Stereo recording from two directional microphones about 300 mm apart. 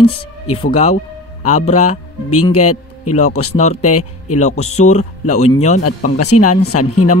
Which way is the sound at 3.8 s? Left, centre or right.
Left.